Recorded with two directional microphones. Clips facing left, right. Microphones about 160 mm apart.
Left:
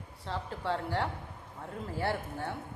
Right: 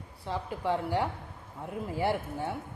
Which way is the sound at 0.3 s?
15° right (ahead or behind).